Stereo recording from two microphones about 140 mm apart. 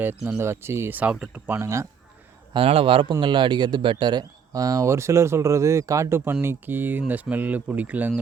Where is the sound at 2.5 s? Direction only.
40° right (ahead or behind).